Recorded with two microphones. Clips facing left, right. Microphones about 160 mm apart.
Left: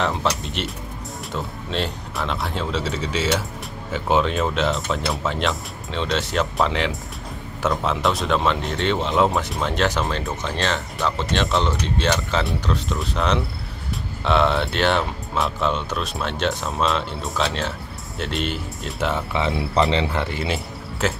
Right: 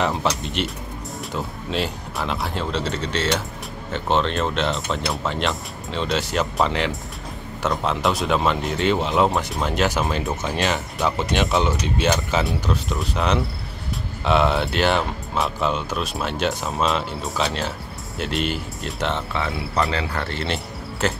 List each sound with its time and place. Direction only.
0.0 s speech: centre (ahead or behind)
19.5 s cricket: 25° left (ahead or behind); by 21.1 s 5° left (ahead or behind)